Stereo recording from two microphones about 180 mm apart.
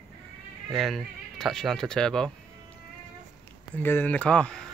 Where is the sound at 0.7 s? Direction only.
Centre (ahead or behind).